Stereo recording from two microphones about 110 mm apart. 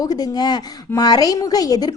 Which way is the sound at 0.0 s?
35° left (ahead or behind).